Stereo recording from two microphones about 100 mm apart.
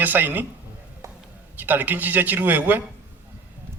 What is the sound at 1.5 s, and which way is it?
Speech, 20° right (ahead or behind).